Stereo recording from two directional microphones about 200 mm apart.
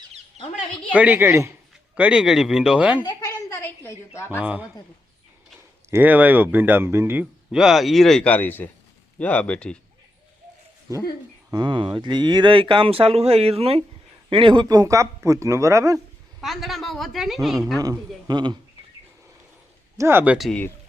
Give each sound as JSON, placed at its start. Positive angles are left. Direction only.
{"t": 0.9, "sound": "a woman's voice", "side_deg": -5}
{"t": 3.0, "sound": "a sound", "side_deg": 20}
{"t": 4.4, "sound": "speech", "side_deg": -5}
{"t": 5.9, "sound": "a woman's voice", "side_deg": -10}
{"t": 11.5, "sound": "speech", "side_deg": -20}
{"t": 16.4, "sound": "a woman's voice", "side_deg": 0}
{"t": 18.3, "sound": "speech", "side_deg": -20}
{"t": 20.0, "sound": "speech", "side_deg": -10}